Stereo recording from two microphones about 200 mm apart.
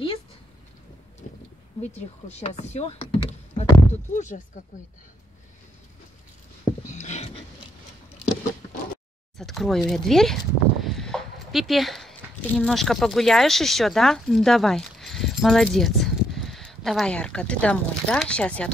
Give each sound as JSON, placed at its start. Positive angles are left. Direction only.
{"t": 1.8, "sound": "speech", "side_deg": 35}
{"t": 6.9, "sound": "a sound", "side_deg": 35}
{"t": 9.4, "sound": "speech", "side_deg": 0}